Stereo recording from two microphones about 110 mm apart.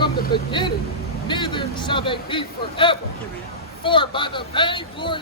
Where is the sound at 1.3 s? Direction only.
45° left (ahead or behind).